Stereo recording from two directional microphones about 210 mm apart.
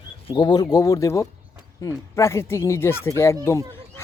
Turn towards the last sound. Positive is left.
turn(degrees=15)  # may be behind; listen again after turning